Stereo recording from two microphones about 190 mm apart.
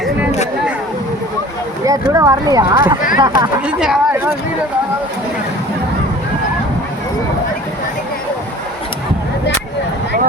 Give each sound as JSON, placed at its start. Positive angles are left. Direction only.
{"t": 0.0, "sound": "a sound", "side_deg": 0}
{"t": 2.1, "sound": "speech", "side_deg": -20}
{"t": 3.7, "sound": "speech", "side_deg": -5}